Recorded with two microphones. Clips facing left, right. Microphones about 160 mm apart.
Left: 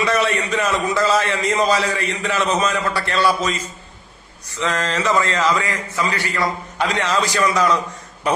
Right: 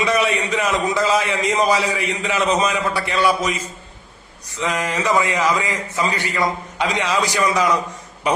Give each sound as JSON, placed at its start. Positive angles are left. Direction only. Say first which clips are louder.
{"t": 0.0, "sound": "a man's voice", "louder": "even", "side_deg": -15}
{"t": 4.6, "sound": "a man's voice", "louder": "even", "side_deg": -15}